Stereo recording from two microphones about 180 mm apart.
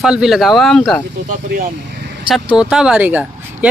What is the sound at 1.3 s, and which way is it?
Speech, 50° right (ahead or behind).